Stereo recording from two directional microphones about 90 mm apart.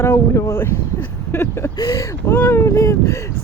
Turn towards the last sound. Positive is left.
turn(degrees=35)  # may be behind; listen again after turning